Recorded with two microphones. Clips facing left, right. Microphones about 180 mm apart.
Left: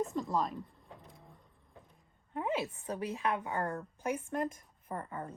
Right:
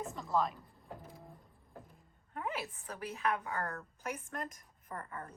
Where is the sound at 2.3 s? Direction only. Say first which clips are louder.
Left 6 dB; 25° left (ahead or behind).